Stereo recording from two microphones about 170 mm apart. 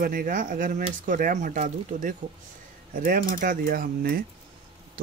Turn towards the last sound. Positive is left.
turn(degrees=-60)  # may be behind; listen again after turning